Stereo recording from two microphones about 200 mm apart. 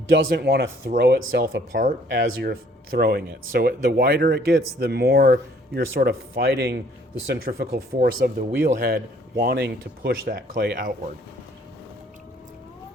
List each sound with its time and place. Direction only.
0.1 s speech: 55° right (ahead or behind)